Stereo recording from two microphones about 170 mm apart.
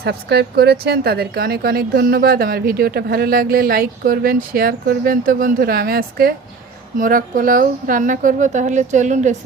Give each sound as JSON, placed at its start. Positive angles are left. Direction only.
{"t": 0.0, "sound": "a woman's voice", "side_deg": -70}